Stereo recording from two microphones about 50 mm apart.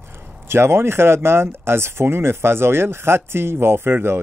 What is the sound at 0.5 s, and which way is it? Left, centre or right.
Speech, right.